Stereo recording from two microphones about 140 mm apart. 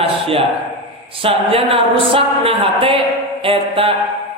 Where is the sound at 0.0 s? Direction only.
45° right (ahead or behind).